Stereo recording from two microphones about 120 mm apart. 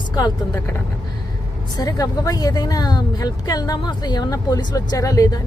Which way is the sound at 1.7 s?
30° left (ahead or behind).